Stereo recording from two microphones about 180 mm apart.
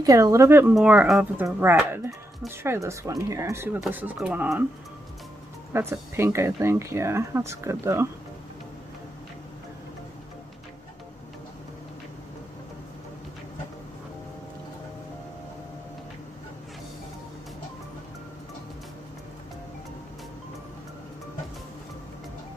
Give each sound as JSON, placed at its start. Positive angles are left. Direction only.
{"t": 0.0, "sound": "speech", "side_deg": -20}
{"t": 5.7, "sound": "speech", "side_deg": -15}